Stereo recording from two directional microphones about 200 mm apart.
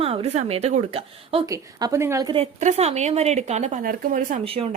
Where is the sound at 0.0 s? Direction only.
30° right (ahead or behind).